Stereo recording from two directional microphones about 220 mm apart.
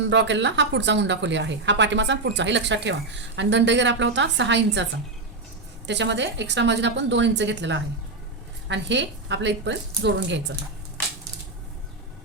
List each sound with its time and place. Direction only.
0.1 s a woman's voice: 55° right (ahead or behind)